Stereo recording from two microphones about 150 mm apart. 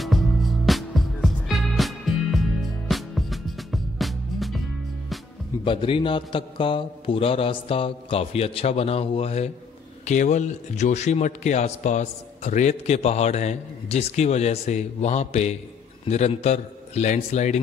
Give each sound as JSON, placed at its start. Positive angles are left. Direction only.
{"t": 0.0, "sound": "music", "side_deg": 0}
{"t": 5.6, "sound": "a man's voice", "side_deg": 35}